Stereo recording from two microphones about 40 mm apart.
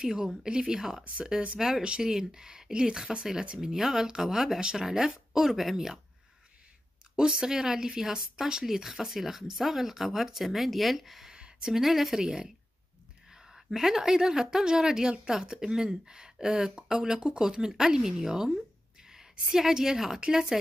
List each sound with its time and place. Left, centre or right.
0.0 s a woman's voice: centre
7.2 s speech: centre
11.3 s a sound: right
11.7 s speech: centre
12.2 s a woman's voice: right
13.3 s a woman's voice: centre